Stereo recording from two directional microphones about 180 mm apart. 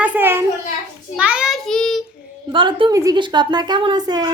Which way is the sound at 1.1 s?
5° right (ahead or behind).